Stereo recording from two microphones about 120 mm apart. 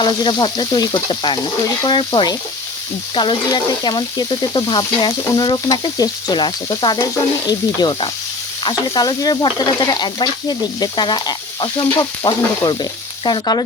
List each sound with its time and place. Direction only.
0.0 s speech: 35° left (ahead or behind)